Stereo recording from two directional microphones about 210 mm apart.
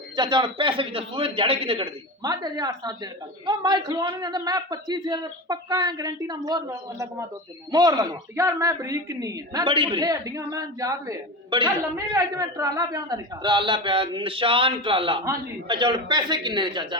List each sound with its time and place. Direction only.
0.2 s speech: 20° right (ahead or behind)